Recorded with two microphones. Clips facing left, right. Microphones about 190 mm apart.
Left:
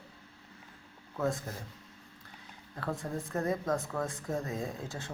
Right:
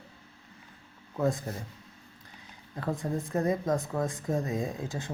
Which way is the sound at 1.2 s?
15° right (ahead or behind).